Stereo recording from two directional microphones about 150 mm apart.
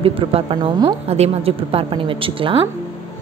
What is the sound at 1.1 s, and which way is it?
A woman's voice, 40° right (ahead or behind).